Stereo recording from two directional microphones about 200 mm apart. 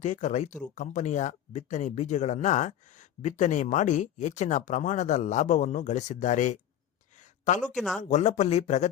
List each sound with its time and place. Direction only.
0.0 s speech: 35° left (ahead or behind)
7.2 s a sound: 35° left (ahead or behind)
7.6 s speech: centre (ahead or behind)
8.0 s speech: 35° left (ahead or behind)